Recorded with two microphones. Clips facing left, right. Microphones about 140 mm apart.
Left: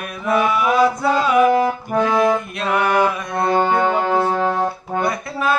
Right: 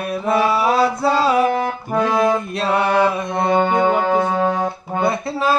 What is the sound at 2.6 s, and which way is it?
Mantra, 30° right (ahead or behind).